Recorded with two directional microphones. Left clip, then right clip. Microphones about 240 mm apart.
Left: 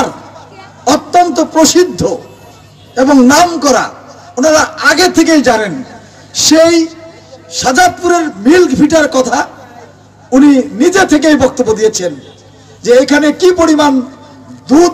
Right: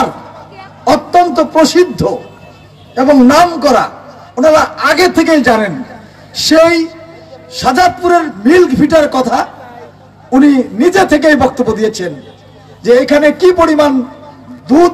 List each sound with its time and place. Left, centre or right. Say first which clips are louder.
0.8 s a sound: even; right
2.9 s a man's voice: even; right
10.5 s a man's voice: left 1 dB; right